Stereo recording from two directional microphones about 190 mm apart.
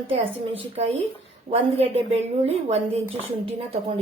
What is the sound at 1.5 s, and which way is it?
A woman's voice, 30° right (ahead or behind).